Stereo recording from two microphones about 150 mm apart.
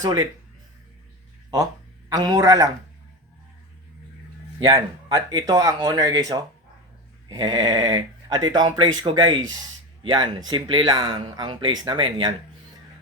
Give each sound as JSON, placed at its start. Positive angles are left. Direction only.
{"t": 0.0, "sound": "speech", "side_deg": -25}
{"t": 2.0, "sound": "speech", "side_deg": -25}
{"t": 4.7, "sound": "speech", "side_deg": -30}